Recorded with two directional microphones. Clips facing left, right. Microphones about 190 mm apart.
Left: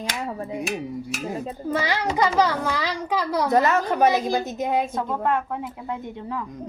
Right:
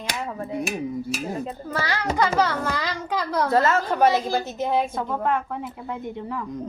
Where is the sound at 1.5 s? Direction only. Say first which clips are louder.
Left 3 dB; 15° left (ahead or behind).